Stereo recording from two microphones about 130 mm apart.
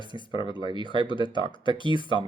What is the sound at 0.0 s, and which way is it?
Speech, 40° left (ahead or behind).